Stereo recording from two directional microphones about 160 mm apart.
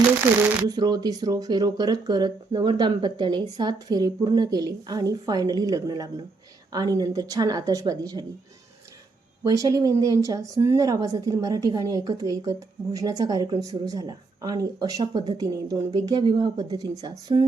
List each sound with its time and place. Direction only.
0.3 s speech: 10° right (ahead or behind)
0.7 s a woman's voice: 25° right (ahead or behind)
9.4 s a woman's voice: 20° right (ahead or behind)